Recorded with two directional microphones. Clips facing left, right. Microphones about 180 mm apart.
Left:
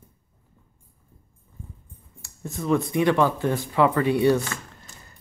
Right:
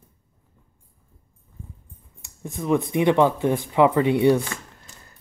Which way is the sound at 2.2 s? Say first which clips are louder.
Right 1 dB; 15° right (ahead or behind).